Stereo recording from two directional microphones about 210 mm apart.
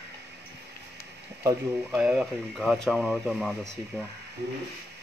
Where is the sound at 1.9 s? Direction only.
5° right (ahead or behind).